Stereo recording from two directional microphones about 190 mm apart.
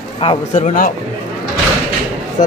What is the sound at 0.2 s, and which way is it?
Speech, 35° left (ahead or behind).